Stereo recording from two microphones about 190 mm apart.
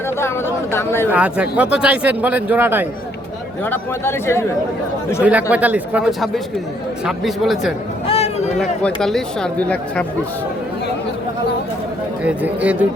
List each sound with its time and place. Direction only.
0.2 s speech: 15° left (ahead or behind)
1.1 s speech: 5° right (ahead or behind)
3.6 s speech: 10° left (ahead or behind)
5.2 s speech: 10° right (ahead or behind)
8.0 s a sound: 30° left (ahead or behind)
8.5 s speech: centre (ahead or behind)
12.2 s speech: 10° right (ahead or behind)